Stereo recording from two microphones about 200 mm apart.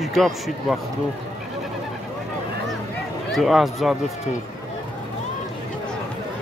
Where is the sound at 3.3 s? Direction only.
Centre (ahead or behind).